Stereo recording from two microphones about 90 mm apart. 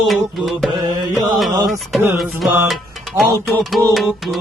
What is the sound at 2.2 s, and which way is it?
Music, centre (ahead or behind).